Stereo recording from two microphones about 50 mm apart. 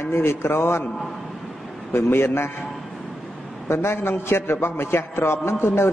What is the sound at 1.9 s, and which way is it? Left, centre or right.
Speech, left.